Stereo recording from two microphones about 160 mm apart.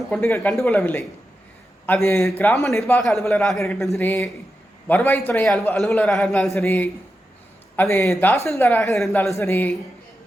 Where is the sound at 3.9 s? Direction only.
15° left (ahead or behind).